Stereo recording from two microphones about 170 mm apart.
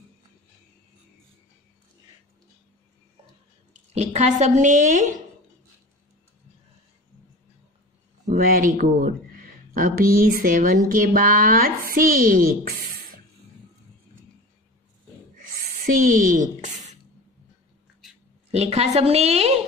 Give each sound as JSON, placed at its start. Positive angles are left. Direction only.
{"t": 3.9, "sound": "a woman's voice", "side_deg": -40}
{"t": 8.3, "sound": "speech", "side_deg": -55}
{"t": 15.3, "sound": "a sound", "side_deg": -55}
{"t": 18.5, "sound": "a woman's voice", "side_deg": -35}